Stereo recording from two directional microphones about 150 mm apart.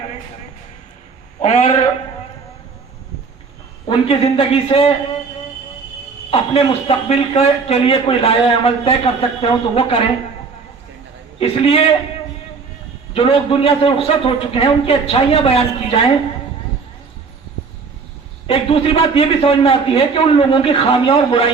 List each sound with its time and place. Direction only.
1.4 s a man's voice: 50° left (ahead or behind)
3.8 s a man's voice: 40° left (ahead or behind)
6.3 s a man's voice: 40° left (ahead or behind)
11.3 s a man's voice: 40° left (ahead or behind)
13.1 s a man's voice: 40° left (ahead or behind)
18.4 s a man's voice: 35° left (ahead or behind)